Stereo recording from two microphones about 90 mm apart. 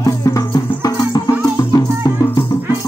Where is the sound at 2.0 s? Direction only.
55° left (ahead or behind).